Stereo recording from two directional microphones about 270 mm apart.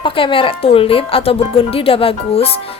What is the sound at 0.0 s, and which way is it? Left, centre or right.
A woman's voice, centre.